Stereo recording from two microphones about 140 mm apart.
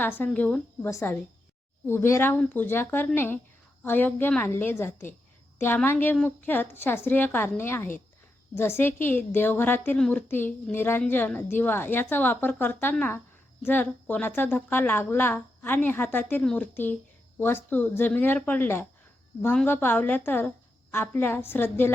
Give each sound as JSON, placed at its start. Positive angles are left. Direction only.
{"t": 0.0, "sound": "a woman's voice", "side_deg": 15}
{"t": 0.9, "sound": "a woman's voice", "side_deg": 20}
{"t": 16.4, "sound": "a woman's voice", "side_deg": 5}